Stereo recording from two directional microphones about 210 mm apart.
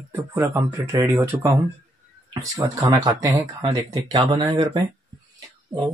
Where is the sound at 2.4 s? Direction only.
15° right (ahead or behind).